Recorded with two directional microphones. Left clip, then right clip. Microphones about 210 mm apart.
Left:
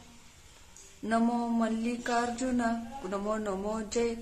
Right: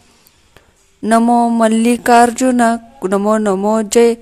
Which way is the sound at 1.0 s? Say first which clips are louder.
Right 18 dB; 40° right (ahead or behind).